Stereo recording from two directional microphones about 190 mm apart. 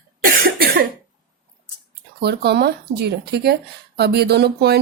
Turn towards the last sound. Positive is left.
turn(degrees=-60)  # may be behind; listen again after turning